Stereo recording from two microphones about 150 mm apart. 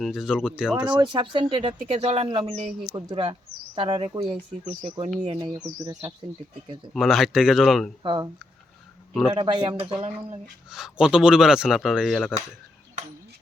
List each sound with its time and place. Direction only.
0.0 s speech: centre (ahead or behind)
0.9 s speech: 30° right (ahead or behind)
5.8 s speech: 20° right (ahead or behind)
6.9 s speech: centre (ahead or behind)
8.0 s speech: 30° right (ahead or behind)
9.3 s speech: 30° right (ahead or behind)
10.7 s speech: 5° right (ahead or behind)